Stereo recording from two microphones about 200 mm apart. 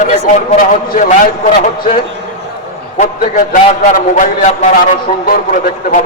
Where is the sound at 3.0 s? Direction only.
40° left (ahead or behind).